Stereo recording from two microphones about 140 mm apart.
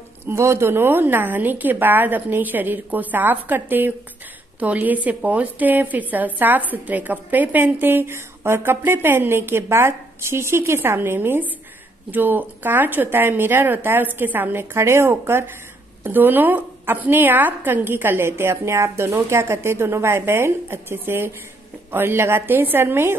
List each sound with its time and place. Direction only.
0.3 s a woman's voice: 20° right (ahead or behind)